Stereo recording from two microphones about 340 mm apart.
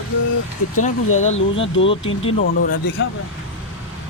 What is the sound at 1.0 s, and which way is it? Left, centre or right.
Speech, left.